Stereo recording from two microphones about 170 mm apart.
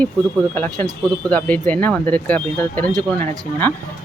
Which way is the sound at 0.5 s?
10° left (ahead or behind).